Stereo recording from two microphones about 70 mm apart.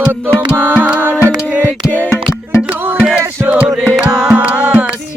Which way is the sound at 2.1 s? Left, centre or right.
Left.